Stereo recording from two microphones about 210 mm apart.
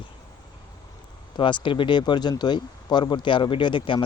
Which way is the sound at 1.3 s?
20° left (ahead or behind).